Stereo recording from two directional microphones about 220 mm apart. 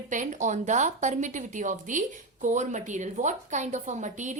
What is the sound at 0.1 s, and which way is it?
Speech, 35° right (ahead or behind).